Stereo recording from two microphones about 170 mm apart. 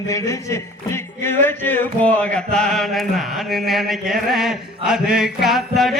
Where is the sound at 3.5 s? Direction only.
Centre (ahead or behind).